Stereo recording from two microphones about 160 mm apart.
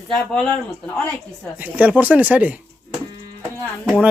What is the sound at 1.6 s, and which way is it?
Speech, 10° right (ahead or behind).